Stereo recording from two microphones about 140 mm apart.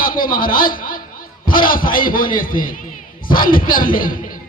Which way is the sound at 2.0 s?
80° left.